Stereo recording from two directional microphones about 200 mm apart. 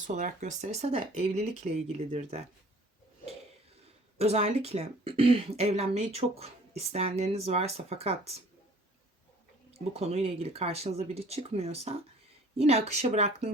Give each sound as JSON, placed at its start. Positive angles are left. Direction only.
{"t": 0.1, "sound": "speech", "side_deg": -40}
{"t": 4.2, "sound": "speech", "side_deg": -30}
{"t": 9.9, "sound": "speech", "side_deg": -30}